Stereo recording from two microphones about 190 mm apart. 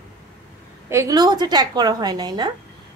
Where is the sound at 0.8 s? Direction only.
15° right (ahead or behind).